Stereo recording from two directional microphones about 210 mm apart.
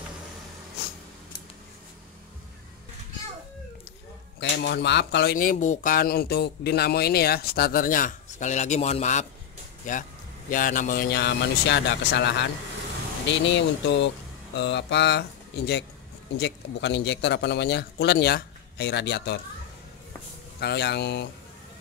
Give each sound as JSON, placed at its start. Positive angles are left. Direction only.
{"t": 4.4, "sound": "speech", "side_deg": 55}
{"t": 20.6, "sound": "speech", "side_deg": 55}